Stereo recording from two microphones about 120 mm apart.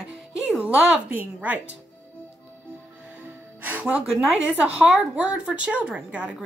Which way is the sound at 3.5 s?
15° right (ahead or behind).